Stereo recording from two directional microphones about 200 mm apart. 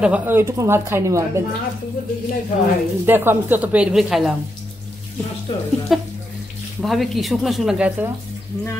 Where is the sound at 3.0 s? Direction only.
10° right (ahead or behind).